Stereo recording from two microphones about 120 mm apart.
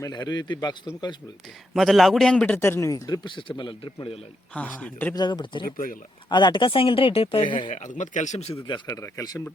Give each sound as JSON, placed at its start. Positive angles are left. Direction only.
{"t": 0.0, "sound": "a man's voice", "side_deg": 35}
{"t": 1.7, "sound": "a man's voice", "side_deg": 0}
{"t": 2.6, "sound": "speech", "side_deg": 20}
{"t": 3.6, "sound": "speech", "side_deg": 40}
{"t": 4.5, "sound": "speech", "side_deg": 10}
{"t": 5.1, "sound": "a man's voice", "side_deg": 40}
{"t": 7.7, "sound": "speech", "side_deg": 90}
{"t": 8.9, "sound": "speech", "side_deg": 25}